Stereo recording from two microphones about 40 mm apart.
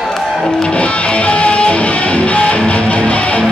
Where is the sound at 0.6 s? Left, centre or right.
Left.